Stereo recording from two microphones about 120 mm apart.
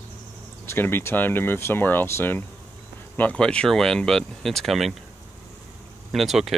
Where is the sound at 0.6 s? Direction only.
20° left (ahead or behind); by 4.9 s centre (ahead or behind).